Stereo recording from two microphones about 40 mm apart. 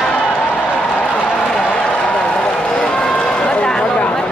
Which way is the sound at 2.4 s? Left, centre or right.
Left.